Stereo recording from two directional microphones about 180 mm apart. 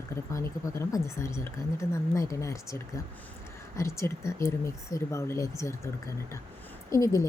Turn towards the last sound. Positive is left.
turn(degrees=15)  # may be behind; listen again after turning